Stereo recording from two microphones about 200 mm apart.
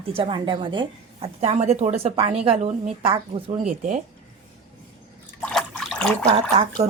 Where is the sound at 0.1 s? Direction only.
25° right (ahead or behind).